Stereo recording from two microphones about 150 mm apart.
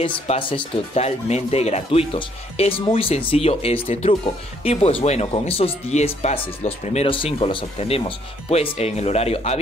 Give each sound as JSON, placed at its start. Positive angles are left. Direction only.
{"t": 0.3, "sound": "speech", "side_deg": 35}